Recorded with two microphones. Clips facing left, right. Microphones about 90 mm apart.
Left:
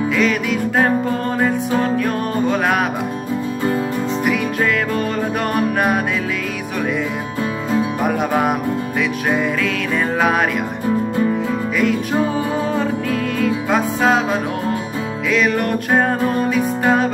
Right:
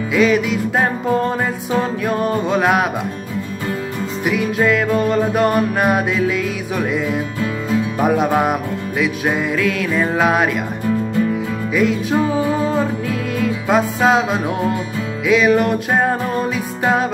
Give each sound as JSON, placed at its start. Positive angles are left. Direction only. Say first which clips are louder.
{"t": 0.1, "sound": "music", "louder": "right 7 dB", "side_deg": -5}
{"t": 4.3, "sound": "music", "louder": "right 5 dB", "side_deg": -5}
{"t": 8.0, "sound": "music", "louder": "right 6 dB", "side_deg": -5}
{"t": 11.7, "sound": "music", "louder": "right 3 dB", "side_deg": -5}
{"t": 15.2, "sound": "music", "louder": "right 4 dB", "side_deg": -5}